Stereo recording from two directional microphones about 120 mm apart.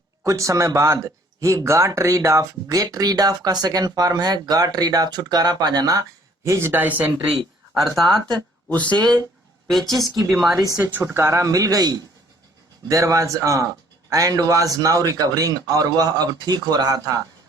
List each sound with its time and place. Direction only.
0.3 s speech: 25° right (ahead or behind)
7.8 s speech: centre (ahead or behind)
8.7 s speech: 10° left (ahead or behind)
10.9 s a man's voice: 20° right (ahead or behind)